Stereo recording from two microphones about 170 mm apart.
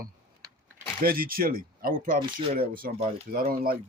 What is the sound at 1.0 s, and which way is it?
Speech, 60° right (ahead or behind).